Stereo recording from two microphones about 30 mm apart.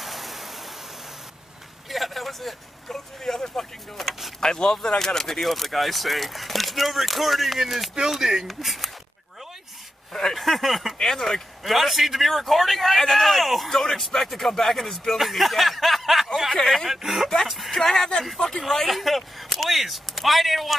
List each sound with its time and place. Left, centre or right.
0.0 s vehicle: centre
1.9 s a man's voice: centre
2.9 s speech: centre
4.0 s speech: centre
4.4 s speech: left
5.4 s speech: centre
8.5 s speech: centre
10.1 s speech: centre
11.0 s speech: centre
11.6 s speech: centre
17.5 s a sound: centre
17.7 s speech: centre
18.9 s speech: centre